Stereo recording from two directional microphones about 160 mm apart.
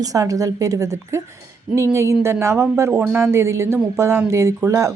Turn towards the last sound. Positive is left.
turn(degrees=-20)  # may be behind; listen again after turning